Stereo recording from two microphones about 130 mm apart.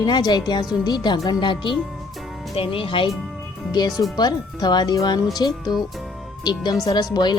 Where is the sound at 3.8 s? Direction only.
30° left (ahead or behind).